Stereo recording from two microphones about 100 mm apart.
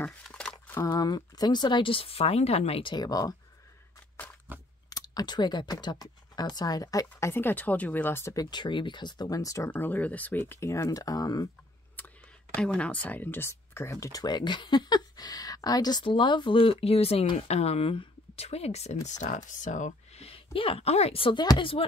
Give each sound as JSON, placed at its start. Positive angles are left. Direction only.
{"t": 0.0, "sound": "a sound", "side_deg": 10}
{"t": 0.7, "sound": "speech", "side_deg": 40}
{"t": 2.8, "sound": "speech", "side_deg": 45}
{"t": 4.5, "sound": "chewing", "side_deg": -15}
{"t": 4.8, "sound": "speech", "side_deg": 40}
{"t": 8.5, "sound": "speech", "side_deg": 50}
{"t": 9.7, "sound": "speech", "side_deg": 15}
{"t": 12.0, "sound": "a sound", "side_deg": 20}
{"t": 12.5, "sound": "speech", "side_deg": 10}
{"t": 20.1, "sound": "a sound", "side_deg": 85}
{"t": 20.5, "sound": "a woman's voice", "side_deg": 70}
{"t": 21.4, "sound": "speech", "side_deg": 45}